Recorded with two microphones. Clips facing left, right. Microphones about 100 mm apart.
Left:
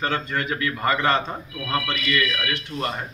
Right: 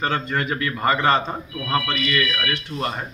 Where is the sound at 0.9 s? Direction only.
30° right (ahead or behind).